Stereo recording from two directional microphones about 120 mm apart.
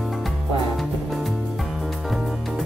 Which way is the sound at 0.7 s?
Centre (ahead or behind).